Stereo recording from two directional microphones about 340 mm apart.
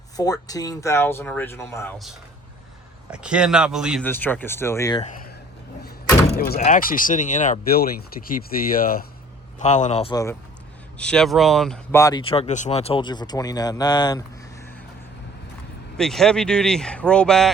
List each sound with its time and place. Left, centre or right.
0.2 s speech: centre
6.4 s speech: left
16.0 s speech: centre